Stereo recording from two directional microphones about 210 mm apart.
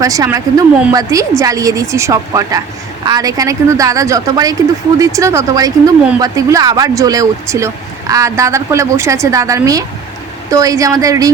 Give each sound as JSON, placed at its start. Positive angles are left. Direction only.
{"t": 0.0, "sound": "speech", "side_deg": -15}